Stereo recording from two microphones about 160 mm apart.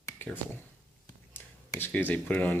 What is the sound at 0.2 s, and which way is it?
Speech, 10° left (ahead or behind).